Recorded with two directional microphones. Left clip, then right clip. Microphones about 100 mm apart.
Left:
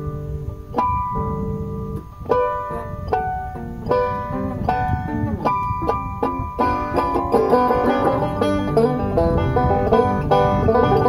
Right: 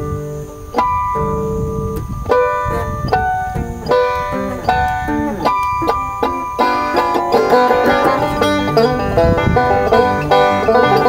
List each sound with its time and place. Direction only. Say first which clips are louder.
2.2 s music: right 5 dB; 40° left (ahead or behind)
3.9 s music: right 6 dB; 40° left (ahead or behind)